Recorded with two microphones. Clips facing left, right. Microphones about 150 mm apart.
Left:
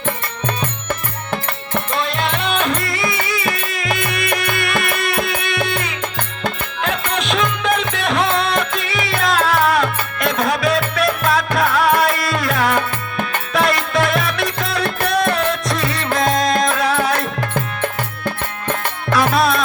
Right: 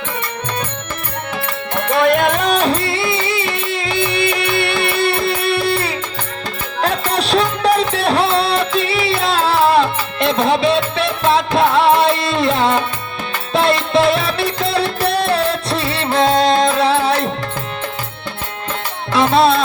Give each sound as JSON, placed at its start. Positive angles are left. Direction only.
{"t": 1.9, "sound": "music", "side_deg": -60}
{"t": 19.1, "sound": "music", "side_deg": -25}